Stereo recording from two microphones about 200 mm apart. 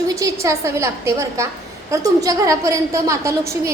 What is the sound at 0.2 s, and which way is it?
A woman's voice, 15° right (ahead or behind).